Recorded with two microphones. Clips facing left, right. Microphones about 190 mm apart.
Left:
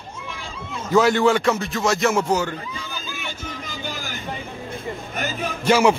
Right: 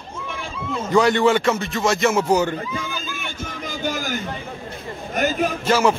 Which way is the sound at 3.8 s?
45° right (ahead or behind).